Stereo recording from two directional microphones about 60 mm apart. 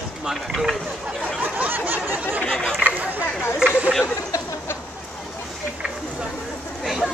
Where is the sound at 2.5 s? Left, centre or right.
Centre.